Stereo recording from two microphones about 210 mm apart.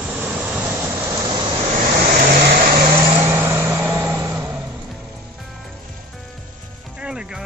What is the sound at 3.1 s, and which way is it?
Vehicle, 15° right (ahead or behind).